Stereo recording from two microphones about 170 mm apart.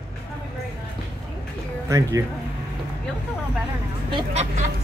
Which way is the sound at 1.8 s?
20° right (ahead or behind).